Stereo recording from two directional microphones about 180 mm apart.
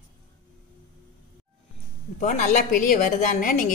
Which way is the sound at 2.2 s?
45° left (ahead or behind).